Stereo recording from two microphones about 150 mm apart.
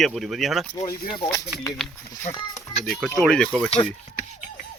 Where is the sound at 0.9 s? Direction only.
35° left (ahead or behind).